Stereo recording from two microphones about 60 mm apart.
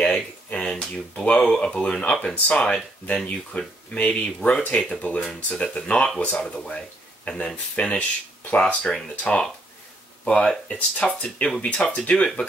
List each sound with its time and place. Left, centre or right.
0.0 s a sound: centre
1.6 s speech: centre
6.4 s speech: centre